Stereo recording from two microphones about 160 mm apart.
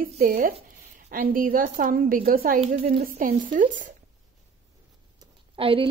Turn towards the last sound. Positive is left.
turn(degrees=-35)  # may be behind; listen again after turning